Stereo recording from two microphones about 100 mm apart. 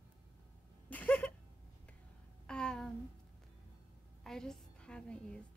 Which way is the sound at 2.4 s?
10° left (ahead or behind).